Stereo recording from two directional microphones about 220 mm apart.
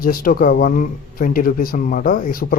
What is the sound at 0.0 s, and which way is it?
Speech, 40° left (ahead or behind).